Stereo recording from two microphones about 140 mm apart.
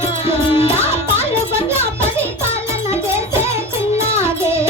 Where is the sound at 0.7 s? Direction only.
15° right (ahead or behind).